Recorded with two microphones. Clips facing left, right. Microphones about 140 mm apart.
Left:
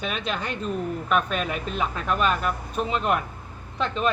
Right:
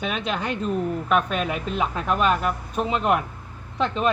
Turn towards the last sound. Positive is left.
turn(degrees=-10)  # may be behind; listen again after turning